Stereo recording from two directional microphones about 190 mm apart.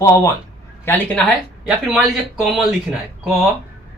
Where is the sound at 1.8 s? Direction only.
Centre (ahead or behind).